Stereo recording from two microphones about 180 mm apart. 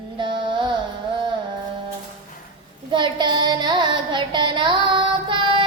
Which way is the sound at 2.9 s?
25° right (ahead or behind).